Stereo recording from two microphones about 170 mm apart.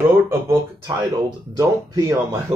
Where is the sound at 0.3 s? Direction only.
15° right (ahead or behind).